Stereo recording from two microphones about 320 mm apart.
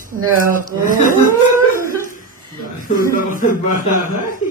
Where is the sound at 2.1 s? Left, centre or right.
Left.